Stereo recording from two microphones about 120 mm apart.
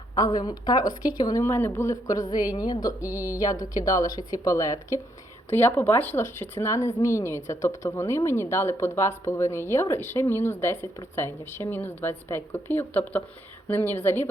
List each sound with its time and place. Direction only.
0.2 s a woman's voice: 35° left (ahead or behind); by 14.3 s 20° left (ahead or behind)